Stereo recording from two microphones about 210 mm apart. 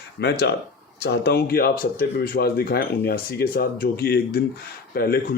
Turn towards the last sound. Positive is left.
turn(degrees=45)  # may be behind; listen again after turning